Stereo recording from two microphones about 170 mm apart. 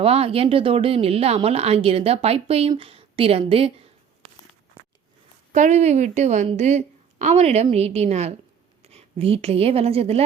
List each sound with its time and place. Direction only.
0.0 s speech: 35° right (ahead or behind)
5.5 s a woman's voice: 45° right (ahead or behind)